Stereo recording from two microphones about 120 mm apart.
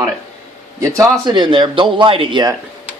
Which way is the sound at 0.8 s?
25° right (ahead or behind).